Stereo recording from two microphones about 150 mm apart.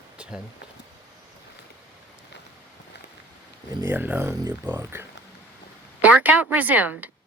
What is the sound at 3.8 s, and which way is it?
Speech, 15° right (ahead or behind).